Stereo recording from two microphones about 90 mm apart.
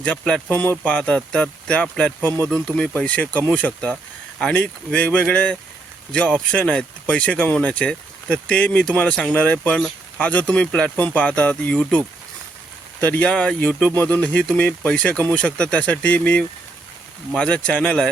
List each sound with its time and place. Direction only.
0.0 s speech: 10° left (ahead or behind)
0.5 s speech: 20° left (ahead or behind)